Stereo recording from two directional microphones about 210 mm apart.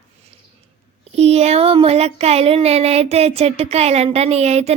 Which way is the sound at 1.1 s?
30° right (ahead or behind).